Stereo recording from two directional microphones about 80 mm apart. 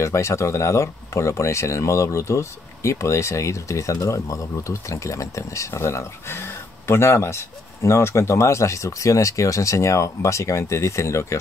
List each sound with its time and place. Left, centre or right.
0.0 s speech: left